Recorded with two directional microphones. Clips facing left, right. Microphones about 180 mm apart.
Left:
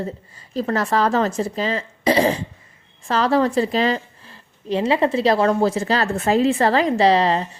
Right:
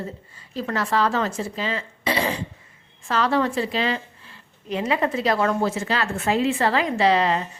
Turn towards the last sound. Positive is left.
turn(degrees=35)  # may be behind; listen again after turning